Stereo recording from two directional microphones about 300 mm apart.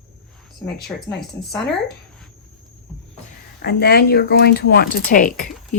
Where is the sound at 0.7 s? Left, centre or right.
Centre.